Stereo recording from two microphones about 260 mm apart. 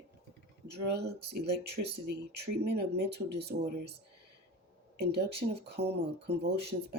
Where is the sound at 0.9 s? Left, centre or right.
Right.